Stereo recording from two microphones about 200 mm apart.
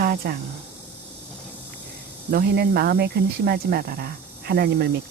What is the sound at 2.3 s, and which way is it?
Speech, 50° right (ahead or behind).